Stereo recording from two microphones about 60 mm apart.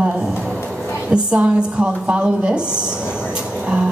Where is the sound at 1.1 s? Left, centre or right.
Centre.